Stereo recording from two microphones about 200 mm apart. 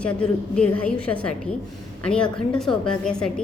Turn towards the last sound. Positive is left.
turn(degrees=5)  # may be behind; listen again after turning